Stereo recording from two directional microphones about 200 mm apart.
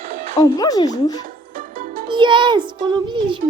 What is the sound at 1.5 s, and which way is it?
Music, 45° right (ahead or behind).